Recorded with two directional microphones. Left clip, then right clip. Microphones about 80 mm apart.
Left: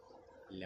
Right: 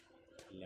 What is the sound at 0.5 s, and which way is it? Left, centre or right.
Speech, left.